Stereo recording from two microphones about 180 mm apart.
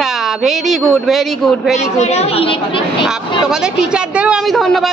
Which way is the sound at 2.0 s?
35° left (ahead or behind).